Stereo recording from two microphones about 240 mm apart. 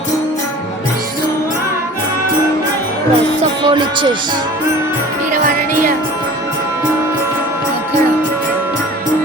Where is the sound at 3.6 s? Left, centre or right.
Centre.